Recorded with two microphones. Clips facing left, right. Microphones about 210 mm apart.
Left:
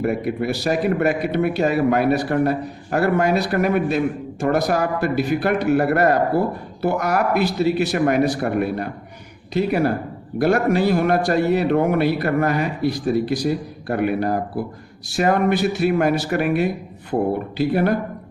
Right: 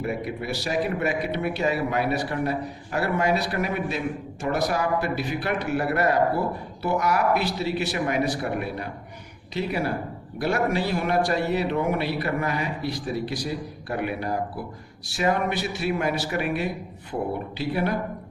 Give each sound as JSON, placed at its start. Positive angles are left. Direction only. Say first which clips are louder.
{"t": 0.0, "sound": "speech", "louder": "left 7 dB", "side_deg": 55}